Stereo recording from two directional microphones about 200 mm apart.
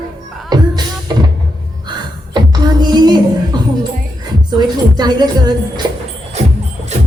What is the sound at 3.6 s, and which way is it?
Music, 20° right (ahead or behind).